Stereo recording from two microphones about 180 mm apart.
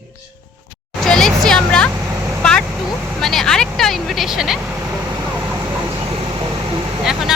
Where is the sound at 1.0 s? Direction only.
Centre (ahead or behind).